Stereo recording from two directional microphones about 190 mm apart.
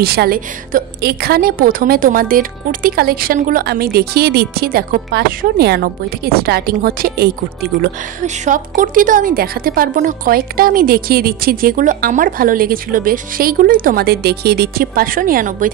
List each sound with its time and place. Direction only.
0.0 s a woman's voice: 55° right (ahead or behind)